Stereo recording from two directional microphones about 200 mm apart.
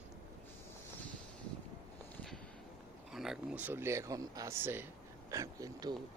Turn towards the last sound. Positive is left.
turn(degrees=-15)  # may be behind; listen again after turning